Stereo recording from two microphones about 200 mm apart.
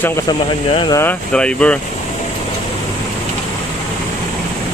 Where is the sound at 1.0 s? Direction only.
5° left (ahead or behind).